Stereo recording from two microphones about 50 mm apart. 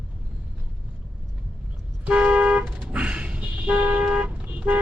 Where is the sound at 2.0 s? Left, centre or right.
Right.